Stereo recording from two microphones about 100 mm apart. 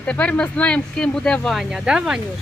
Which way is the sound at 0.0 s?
15° left (ahead or behind).